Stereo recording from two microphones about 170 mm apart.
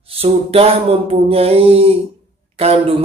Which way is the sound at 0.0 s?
35° right (ahead or behind).